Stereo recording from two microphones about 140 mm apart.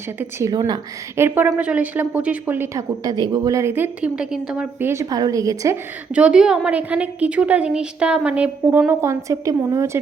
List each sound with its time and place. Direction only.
0.2 s a woman's voice: 20° right (ahead or behind)
0.5 s a woman's voice: 30° right (ahead or behind)
1.1 s a woman's voice: 15° right (ahead or behind)
3.0 s a woman's voice: 25° right (ahead or behind)
6.1 s a woman's voice: 5° right (ahead or behind)